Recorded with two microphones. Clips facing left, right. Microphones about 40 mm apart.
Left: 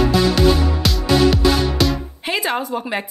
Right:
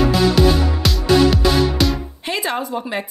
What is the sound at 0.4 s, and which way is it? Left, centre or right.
Music, centre.